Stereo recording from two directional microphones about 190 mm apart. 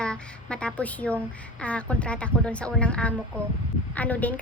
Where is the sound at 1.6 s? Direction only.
5° left (ahead or behind).